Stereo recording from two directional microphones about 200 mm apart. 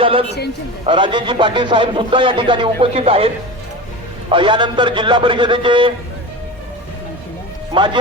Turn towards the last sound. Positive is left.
turn(degrees=-25)  # may be behind; listen again after turning